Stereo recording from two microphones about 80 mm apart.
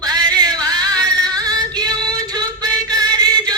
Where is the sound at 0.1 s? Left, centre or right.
Right.